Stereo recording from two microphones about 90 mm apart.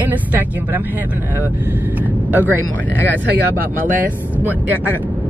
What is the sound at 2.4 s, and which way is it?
Speech, 25° left (ahead or behind).